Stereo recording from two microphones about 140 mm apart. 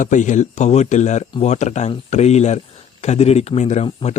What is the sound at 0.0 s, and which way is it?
Speech, 65° left (ahead or behind).